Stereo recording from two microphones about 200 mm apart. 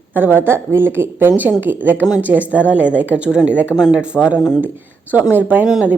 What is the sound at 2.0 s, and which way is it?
Speech, 20° left (ahead or behind).